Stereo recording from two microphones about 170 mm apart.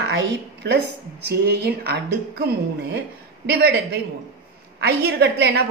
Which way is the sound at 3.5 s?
70° right (ahead or behind).